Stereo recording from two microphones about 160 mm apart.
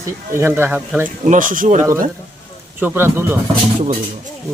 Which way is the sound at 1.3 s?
55° right (ahead or behind).